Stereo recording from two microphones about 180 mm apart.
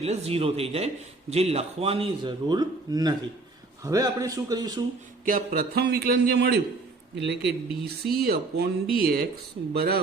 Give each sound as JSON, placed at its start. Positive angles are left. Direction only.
{"t": 0.0, "sound": "a man's voice", "side_deg": -35}
{"t": 5.2, "sound": "a man's voice", "side_deg": -50}